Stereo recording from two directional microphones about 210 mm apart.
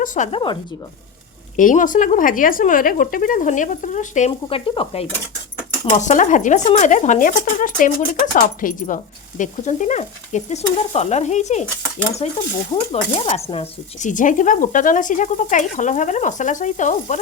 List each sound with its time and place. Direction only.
0.0 s a woman's voice: 35° left (ahead or behind)
1.5 s speech: 40° left (ahead or behind)
5.9 s speech: 35° left (ahead or behind)